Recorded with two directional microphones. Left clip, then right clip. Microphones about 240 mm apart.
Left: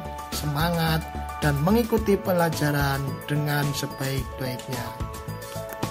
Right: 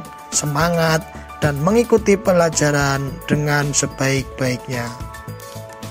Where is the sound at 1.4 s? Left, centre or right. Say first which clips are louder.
Right 7 dB; right.